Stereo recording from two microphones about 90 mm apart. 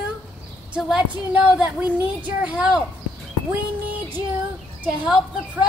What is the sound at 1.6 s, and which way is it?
A woman's voice, 15° right (ahead or behind).